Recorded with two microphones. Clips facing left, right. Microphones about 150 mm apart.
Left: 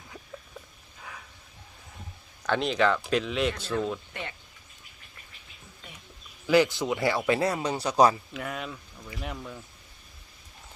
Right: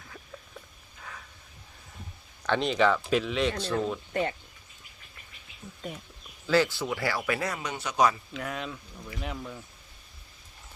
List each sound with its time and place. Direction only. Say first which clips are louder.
2.4 s speech: even; centre (ahead or behind)
3.5 s speech: right 1 dB; 35° right (ahead or behind)
5.8 s speech: right 12 dB; 45° right (ahead or behind)
6.5 s speech: left 3 dB; 15° left (ahead or behind); by 8.1 s 35° left (ahead or behind)
8.3 s speech: even; centre (ahead or behind)